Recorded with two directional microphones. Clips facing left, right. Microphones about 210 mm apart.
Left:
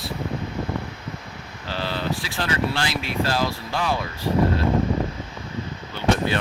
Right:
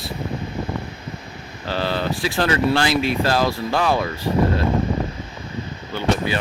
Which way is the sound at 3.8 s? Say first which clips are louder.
Right 4 dB; 60° right (ahead or behind).